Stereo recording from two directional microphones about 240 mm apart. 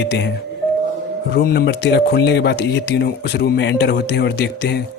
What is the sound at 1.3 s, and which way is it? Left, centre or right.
A man's voice, left.